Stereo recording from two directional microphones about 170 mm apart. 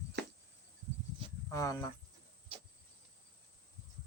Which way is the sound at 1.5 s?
20° left (ahead or behind).